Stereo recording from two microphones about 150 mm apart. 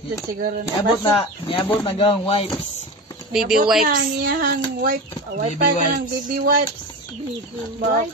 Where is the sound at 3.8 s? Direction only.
70° right (ahead or behind).